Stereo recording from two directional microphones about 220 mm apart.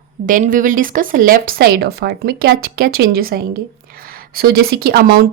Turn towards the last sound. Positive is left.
turn(degrees=-45)  # may be behind; listen again after turning